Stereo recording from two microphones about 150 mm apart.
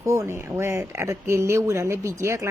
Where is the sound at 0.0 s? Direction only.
20° right (ahead or behind).